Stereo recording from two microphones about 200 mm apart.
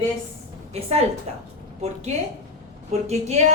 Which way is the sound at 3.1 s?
35° right (ahead or behind).